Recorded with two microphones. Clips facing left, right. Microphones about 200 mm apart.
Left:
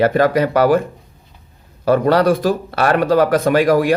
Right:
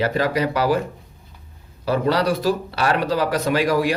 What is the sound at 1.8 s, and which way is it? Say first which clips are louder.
Speech: left 6 dB; 50° left (ahead or behind).